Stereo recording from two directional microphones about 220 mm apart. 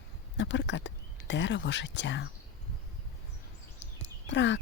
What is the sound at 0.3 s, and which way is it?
Speech, 55° left (ahead or behind).